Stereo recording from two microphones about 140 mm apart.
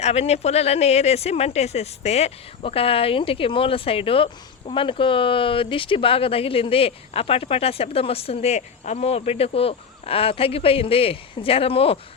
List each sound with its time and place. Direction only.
0.0 s speech: 50° left (ahead or behind)